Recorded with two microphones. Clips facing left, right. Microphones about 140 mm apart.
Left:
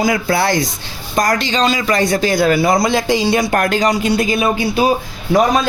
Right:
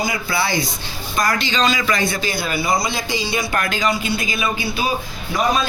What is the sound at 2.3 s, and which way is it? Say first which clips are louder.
Speech: left 8 dB; 90° left.